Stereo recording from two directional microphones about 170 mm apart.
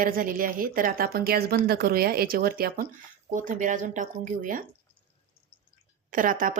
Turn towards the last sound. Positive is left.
turn(degrees=-50)  # may be behind; listen again after turning